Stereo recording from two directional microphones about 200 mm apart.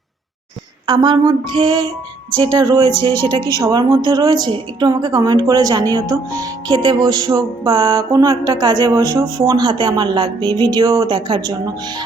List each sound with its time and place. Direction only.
0.9 s a woman's voice: 20° right (ahead or behind)